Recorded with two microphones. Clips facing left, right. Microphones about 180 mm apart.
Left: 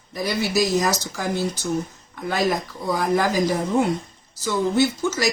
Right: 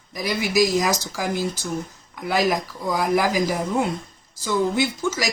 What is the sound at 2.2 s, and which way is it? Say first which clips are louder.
Speech: right 1 dB; 10° right (ahead or behind).